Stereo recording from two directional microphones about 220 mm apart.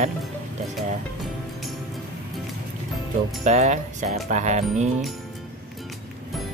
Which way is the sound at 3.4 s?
30° right (ahead or behind).